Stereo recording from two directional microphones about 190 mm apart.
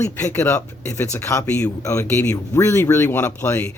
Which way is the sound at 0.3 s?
10° left (ahead or behind).